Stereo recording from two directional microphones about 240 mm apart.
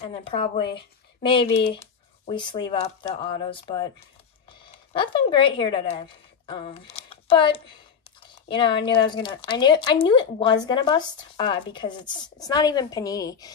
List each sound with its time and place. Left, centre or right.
0.0 s speech: left
4.9 s a woman's voice: left